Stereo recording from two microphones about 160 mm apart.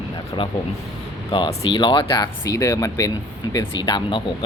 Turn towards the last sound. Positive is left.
turn(degrees=30)  # may be behind; listen again after turning